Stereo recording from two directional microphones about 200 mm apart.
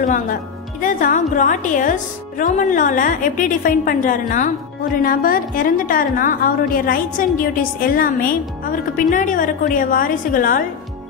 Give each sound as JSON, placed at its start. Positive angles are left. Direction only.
{"t": 0.0, "sound": "a woman's voice", "side_deg": 45}